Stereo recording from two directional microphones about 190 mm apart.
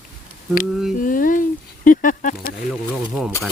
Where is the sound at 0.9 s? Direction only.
45° left (ahead or behind).